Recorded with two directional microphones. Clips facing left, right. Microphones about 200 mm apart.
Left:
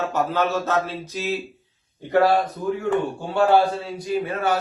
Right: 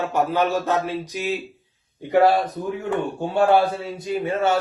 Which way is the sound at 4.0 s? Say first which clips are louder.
Right 2 dB; 25° right (ahead or behind).